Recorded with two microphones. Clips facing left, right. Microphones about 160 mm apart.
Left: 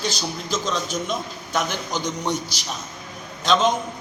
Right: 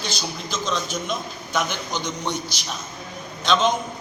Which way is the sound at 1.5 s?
Centre (ahead or behind).